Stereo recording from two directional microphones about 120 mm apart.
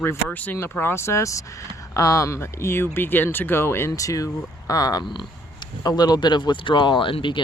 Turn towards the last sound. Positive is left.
turn(degrees=45)  # may be behind; listen again after turning